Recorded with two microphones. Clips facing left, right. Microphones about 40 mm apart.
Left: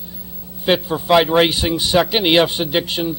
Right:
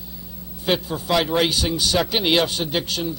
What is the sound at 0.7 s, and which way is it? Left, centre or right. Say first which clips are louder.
A man's voice: left 6 dB; left.